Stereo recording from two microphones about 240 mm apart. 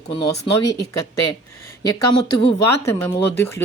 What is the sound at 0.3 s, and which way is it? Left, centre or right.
Speech, centre.